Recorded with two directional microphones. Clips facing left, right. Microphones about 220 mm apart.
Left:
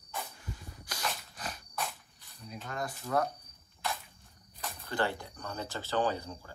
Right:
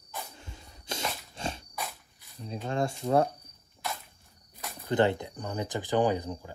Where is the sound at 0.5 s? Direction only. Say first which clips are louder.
Right 4 dB; 25° right (ahead or behind).